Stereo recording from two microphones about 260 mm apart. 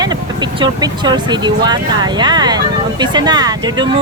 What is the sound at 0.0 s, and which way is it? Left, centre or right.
Speech, centre.